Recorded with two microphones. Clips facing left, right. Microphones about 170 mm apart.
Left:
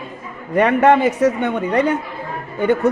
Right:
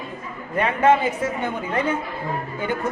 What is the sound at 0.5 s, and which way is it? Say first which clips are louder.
Speech: left 5 dB; 75° left (ahead or behind).